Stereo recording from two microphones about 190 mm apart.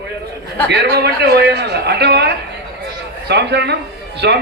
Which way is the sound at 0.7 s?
60° right (ahead or behind).